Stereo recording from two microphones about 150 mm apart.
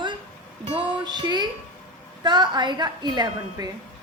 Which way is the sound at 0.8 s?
30° right (ahead or behind).